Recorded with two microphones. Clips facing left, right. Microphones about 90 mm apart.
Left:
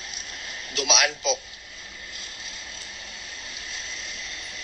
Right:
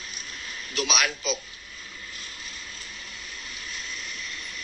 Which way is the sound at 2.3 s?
35° left (ahead or behind).